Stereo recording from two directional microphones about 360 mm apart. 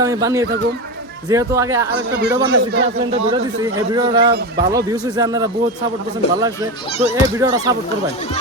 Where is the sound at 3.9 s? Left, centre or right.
Centre.